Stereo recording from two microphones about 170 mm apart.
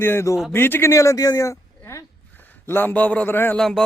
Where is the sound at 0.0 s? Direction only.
15° left (ahead or behind).